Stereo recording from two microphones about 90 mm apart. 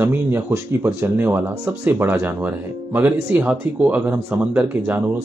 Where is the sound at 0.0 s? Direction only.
25° right (ahead or behind).